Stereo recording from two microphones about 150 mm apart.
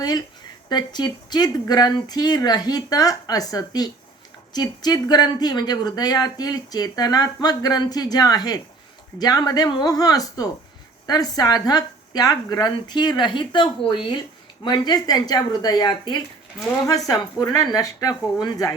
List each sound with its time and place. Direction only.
0.7 s speech: 30° left (ahead or behind)
17.4 s speech: 25° left (ahead or behind)